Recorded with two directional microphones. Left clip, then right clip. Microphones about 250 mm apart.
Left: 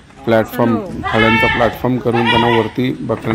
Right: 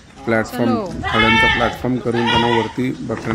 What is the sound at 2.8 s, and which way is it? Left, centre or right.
Speech, centre.